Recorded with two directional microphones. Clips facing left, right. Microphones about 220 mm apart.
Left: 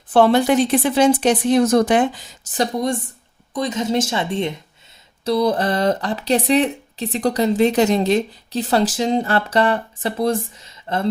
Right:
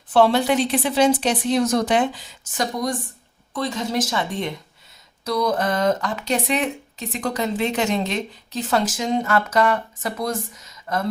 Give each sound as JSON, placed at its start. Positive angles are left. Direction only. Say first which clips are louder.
{"t": 0.1, "sound": "a woman's voice", "louder": "left 3 dB", "side_deg": 50}
{"t": 2.6, "sound": "a woman's voice", "louder": "left 4 dB", "side_deg": 25}